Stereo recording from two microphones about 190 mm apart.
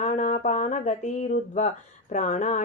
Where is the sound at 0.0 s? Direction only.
40° left (ahead or behind).